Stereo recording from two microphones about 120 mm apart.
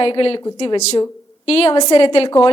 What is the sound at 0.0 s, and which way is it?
Speech, 50° left (ahead or behind).